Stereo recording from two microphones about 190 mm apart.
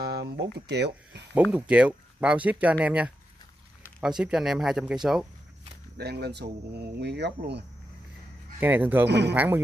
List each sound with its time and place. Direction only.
0.0 s speech: 60° right (ahead or behind)
1.5 s speech: 5° right (ahead or behind)
4.2 s speech: 5° right (ahead or behind)
5.9 s speech: 60° right (ahead or behind)
8.5 s speech: 10° right (ahead or behind)
9.0 s speech: 65° right (ahead or behind)
9.3 s speech: 10° right (ahead or behind)